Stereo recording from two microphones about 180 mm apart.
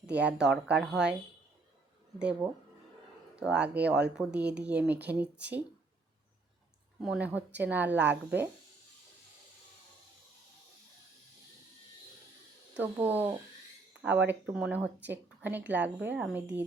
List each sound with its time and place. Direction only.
0.0 s speech: 5° right (ahead or behind)
7.0 s speech: 5° right (ahead or behind)
7.9 s a woman's voice: 75° right (ahead or behind)
12.7 s speech: 10° right (ahead or behind)